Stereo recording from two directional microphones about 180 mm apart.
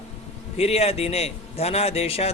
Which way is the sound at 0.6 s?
35° left (ahead or behind).